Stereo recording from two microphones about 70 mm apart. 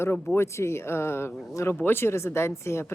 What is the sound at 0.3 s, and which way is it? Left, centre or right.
Speech, left.